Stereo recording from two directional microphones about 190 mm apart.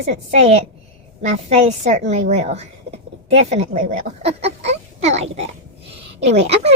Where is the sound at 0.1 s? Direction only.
35° right (ahead or behind).